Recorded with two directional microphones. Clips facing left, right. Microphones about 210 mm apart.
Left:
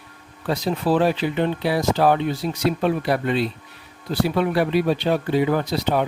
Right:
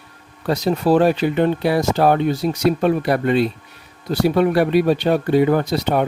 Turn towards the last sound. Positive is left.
turn(degrees=-50)  # may be behind; listen again after turning